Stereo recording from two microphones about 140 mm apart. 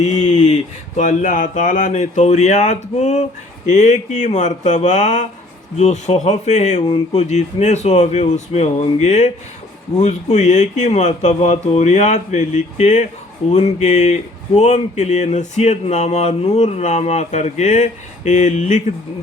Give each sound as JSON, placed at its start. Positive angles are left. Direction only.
{"t": 0.0, "sound": "speech", "side_deg": 55}